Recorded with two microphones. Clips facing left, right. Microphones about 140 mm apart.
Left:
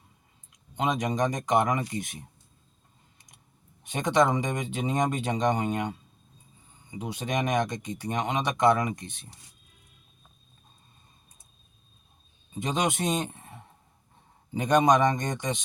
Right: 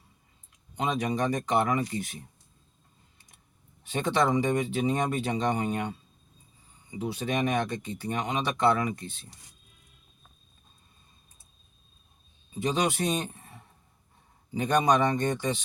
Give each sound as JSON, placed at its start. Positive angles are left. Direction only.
{"t": 0.8, "sound": "speech", "side_deg": 20}
{"t": 3.8, "sound": "speech", "side_deg": 15}
{"t": 7.0, "sound": "speech", "side_deg": 15}
{"t": 12.5, "sound": "speech", "side_deg": 20}
{"t": 14.6, "sound": "speech", "side_deg": 15}